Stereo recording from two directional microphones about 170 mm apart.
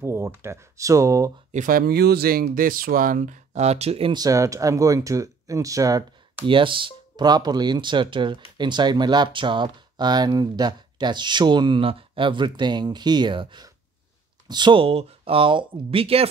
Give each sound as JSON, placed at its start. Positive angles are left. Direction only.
{"t": 0.0, "sound": "speech", "side_deg": -15}
{"t": 1.5, "sound": "speech", "side_deg": -50}